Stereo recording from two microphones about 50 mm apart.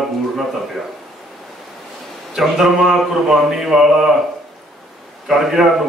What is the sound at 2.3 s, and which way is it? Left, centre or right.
Speech, centre.